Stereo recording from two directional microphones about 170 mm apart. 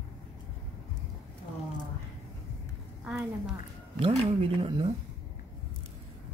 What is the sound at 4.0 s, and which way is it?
Speech, 35° right (ahead or behind).